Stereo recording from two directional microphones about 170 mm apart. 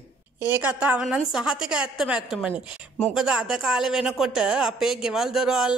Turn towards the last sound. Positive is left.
turn(degrees=-5)  # may be behind; listen again after turning